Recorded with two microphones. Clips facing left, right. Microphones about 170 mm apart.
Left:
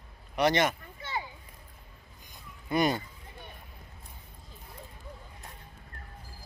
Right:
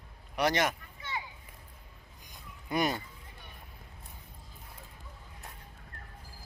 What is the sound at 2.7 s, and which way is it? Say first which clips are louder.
Speech: left 3 dB; 5° right (ahead or behind).